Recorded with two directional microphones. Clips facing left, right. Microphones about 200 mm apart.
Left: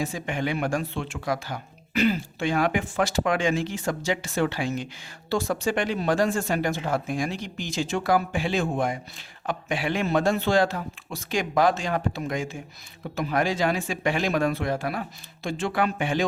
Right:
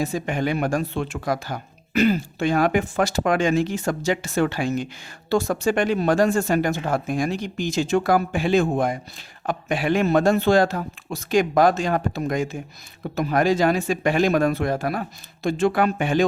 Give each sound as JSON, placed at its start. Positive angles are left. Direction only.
{"t": 0.0, "sound": "speech", "side_deg": -40}